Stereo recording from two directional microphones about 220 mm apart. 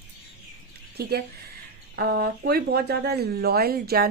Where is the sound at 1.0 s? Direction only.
45° right (ahead or behind).